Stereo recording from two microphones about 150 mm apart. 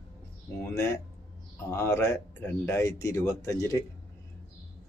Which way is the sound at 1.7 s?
15° left (ahead or behind).